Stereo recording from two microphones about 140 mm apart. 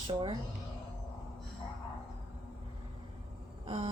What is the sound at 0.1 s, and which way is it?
Speech, 40° right (ahead or behind).